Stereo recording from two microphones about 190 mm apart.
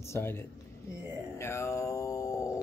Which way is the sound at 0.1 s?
10° left (ahead or behind).